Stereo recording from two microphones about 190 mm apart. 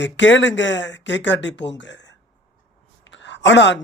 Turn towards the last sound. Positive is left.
turn(degrees=65)  # may be behind; listen again after turning